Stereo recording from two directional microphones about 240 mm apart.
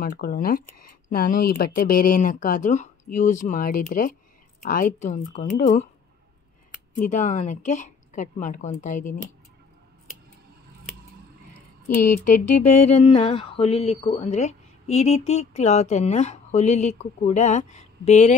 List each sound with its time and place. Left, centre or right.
0.0 s speech: left
7.1 s speech: left
12.4 s music: left
12.9 s speech: left